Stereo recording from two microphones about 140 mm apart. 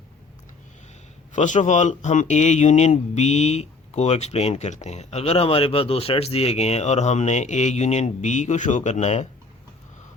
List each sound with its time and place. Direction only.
1.3 s speech: 60° left (ahead or behind)